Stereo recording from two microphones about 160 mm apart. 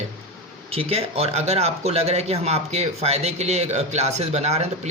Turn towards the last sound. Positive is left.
turn(degrees=-45)  # may be behind; listen again after turning